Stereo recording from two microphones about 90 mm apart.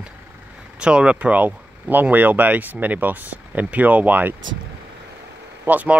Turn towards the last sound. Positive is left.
turn(degrees=-20)  # may be behind; listen again after turning